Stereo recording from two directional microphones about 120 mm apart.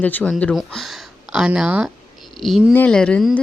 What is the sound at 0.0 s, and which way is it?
Speech, 15° left (ahead or behind).